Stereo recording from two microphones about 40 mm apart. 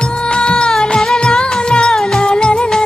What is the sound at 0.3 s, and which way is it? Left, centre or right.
Music, left.